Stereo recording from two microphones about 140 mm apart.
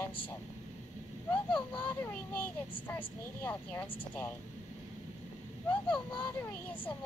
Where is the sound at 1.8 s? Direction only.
10° left (ahead or behind).